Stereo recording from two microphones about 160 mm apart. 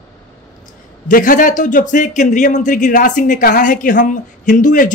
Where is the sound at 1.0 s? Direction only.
55° left (ahead or behind).